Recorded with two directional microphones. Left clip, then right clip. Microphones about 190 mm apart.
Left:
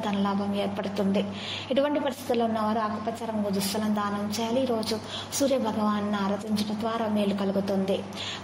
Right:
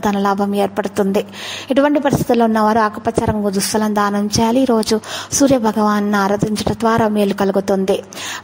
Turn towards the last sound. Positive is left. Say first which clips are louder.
# right 12 dB
turn(degrees=-45)  # may be behind; listen again after turning